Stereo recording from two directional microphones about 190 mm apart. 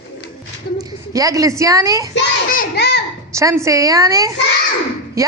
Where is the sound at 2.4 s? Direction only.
50° left (ahead or behind).